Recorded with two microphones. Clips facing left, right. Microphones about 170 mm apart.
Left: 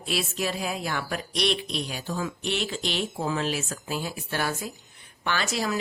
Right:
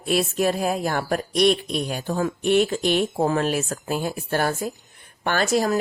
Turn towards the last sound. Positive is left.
turn(degrees=-45)  # may be behind; listen again after turning